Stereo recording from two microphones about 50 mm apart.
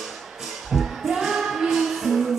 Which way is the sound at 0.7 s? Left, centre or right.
Centre.